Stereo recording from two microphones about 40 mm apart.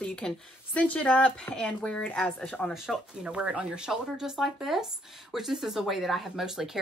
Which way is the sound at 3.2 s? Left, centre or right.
Right.